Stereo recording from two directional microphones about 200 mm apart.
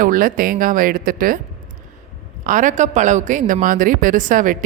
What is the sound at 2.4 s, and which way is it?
Speech, 40° right (ahead or behind).